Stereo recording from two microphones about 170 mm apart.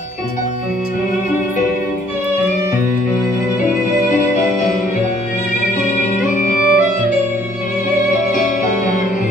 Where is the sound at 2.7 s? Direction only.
50° left (ahead or behind).